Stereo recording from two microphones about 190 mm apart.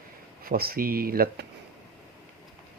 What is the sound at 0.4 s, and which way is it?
Speech, 50° right (ahead or behind).